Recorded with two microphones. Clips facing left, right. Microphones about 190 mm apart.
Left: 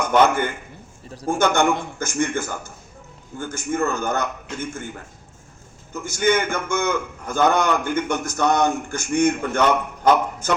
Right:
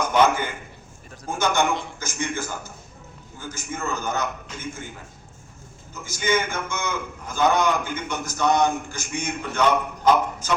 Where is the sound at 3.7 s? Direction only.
55° left (ahead or behind).